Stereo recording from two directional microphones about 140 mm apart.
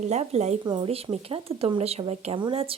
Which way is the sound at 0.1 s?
50° right (ahead or behind).